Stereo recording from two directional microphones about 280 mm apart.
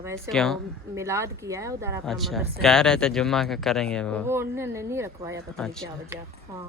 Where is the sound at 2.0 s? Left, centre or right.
Centre.